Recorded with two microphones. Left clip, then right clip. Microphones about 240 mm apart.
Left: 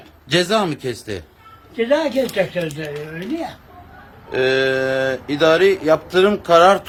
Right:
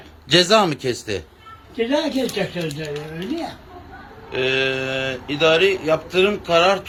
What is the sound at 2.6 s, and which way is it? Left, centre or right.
Speech, left.